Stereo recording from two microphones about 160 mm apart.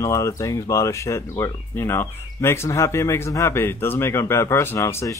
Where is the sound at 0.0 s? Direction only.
20° left (ahead or behind).